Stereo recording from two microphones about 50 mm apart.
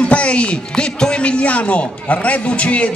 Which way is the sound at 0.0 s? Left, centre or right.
Left.